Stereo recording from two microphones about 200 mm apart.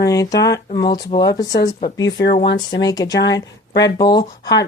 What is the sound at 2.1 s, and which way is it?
Speech, 55° left (ahead or behind).